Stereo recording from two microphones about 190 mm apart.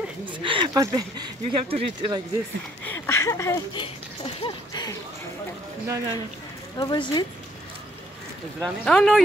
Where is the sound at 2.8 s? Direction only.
10° left (ahead or behind).